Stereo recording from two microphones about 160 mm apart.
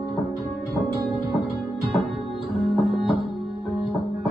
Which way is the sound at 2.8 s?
Centre (ahead or behind).